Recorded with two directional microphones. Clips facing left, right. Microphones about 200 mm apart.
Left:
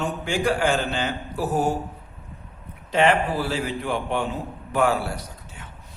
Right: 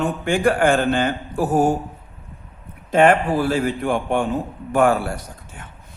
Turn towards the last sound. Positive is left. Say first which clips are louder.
# right 2 dB
turn(degrees=-50)  # may be behind; listen again after turning